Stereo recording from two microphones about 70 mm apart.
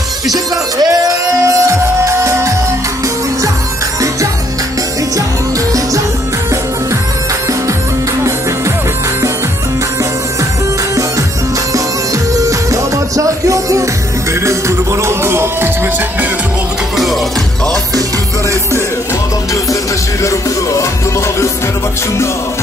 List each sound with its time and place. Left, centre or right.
0.9 s music: right
1.5 s music: right
12.4 s music: right